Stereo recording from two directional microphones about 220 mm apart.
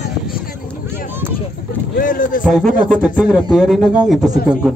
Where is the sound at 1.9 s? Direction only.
40° left (ahead or behind).